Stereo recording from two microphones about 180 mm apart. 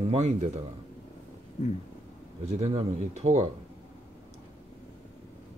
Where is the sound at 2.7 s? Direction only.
35° right (ahead or behind).